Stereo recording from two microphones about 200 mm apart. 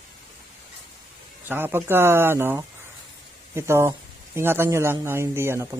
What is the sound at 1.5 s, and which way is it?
Speech, 10° right (ahead or behind).